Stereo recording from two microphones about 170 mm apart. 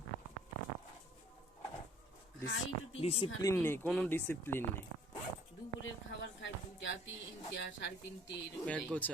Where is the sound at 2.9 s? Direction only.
35° left (ahead or behind).